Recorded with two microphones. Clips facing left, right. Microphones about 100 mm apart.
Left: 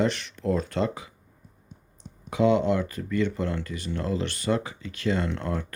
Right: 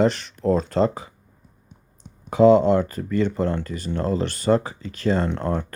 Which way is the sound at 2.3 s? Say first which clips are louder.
Right 7 dB; 40° right (ahead or behind).